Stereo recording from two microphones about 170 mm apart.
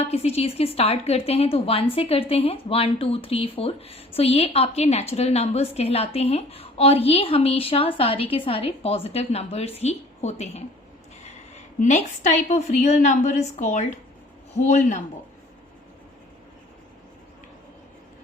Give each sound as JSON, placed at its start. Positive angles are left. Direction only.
{"t": 0.0, "sound": "speech", "side_deg": 35}
{"t": 11.8, "sound": "a woman's voice", "side_deg": 45}